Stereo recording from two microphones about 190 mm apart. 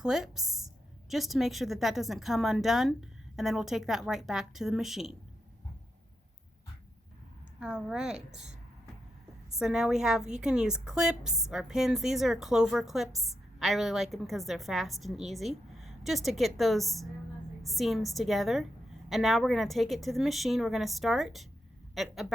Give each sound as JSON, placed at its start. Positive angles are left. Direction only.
{"t": 0.0, "sound": "a woman's voice", "side_deg": 0}
{"t": 7.6, "sound": "a woman's voice", "side_deg": -5}
{"t": 8.3, "sound": "speech", "side_deg": -35}
{"t": 9.6, "sound": "a woman's voice", "side_deg": 0}